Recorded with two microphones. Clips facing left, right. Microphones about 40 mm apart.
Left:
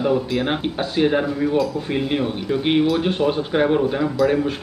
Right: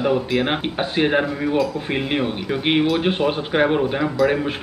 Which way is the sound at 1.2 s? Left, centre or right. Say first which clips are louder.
Left 1 dB; centre.